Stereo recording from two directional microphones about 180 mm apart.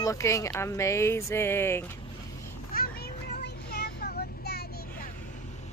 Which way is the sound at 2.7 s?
55° left (ahead or behind).